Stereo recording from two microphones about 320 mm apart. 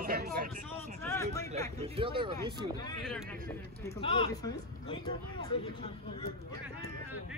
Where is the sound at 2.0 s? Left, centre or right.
Centre.